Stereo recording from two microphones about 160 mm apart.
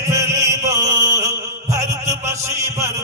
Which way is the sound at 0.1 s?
20° right (ahead or behind).